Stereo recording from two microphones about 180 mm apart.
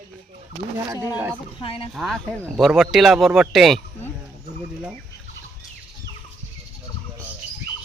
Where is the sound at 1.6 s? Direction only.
30° left (ahead or behind).